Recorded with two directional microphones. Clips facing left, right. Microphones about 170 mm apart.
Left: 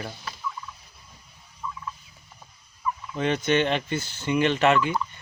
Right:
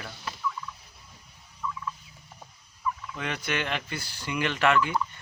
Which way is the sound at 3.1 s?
25° left (ahead or behind).